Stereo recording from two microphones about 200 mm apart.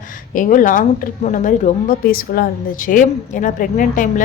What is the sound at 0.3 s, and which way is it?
A woman's voice, 40° left (ahead or behind).